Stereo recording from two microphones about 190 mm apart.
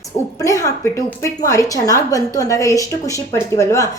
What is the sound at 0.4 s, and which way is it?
A woman's voice, 15° left (ahead or behind).